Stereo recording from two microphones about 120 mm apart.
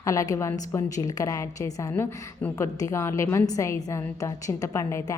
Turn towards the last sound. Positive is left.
turn(degrees=25)  # may be behind; listen again after turning